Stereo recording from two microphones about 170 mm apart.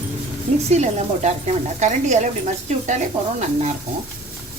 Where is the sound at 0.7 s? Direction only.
40° right (ahead or behind).